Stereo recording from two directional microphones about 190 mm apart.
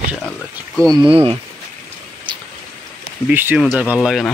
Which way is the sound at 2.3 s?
25° right (ahead or behind).